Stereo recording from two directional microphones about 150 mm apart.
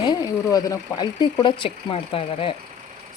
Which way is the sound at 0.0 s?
25° left (ahead or behind).